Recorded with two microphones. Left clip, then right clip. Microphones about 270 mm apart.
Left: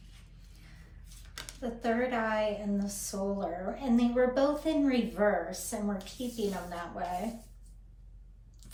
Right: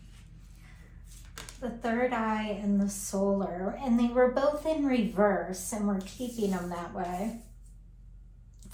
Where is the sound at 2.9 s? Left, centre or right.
Centre.